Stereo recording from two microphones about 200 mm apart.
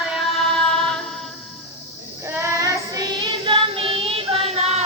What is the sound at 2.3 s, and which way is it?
Child singing, 15° right (ahead or behind).